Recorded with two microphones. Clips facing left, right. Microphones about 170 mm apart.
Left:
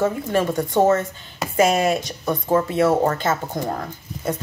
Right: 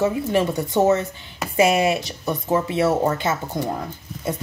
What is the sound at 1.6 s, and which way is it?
Speech, 10° right (ahead or behind).